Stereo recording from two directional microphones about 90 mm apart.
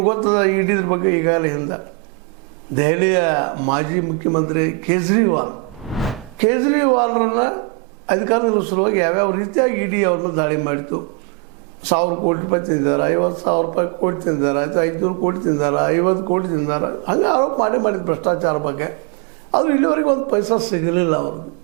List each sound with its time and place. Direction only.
0.0 s speech: 20° right (ahead or behind)
5.9 s a sound: centre (ahead or behind)
6.5 s speech: 15° right (ahead or behind)
20.4 s a man's voice: 30° right (ahead or behind)
20.7 s a man's voice: 15° right (ahead or behind)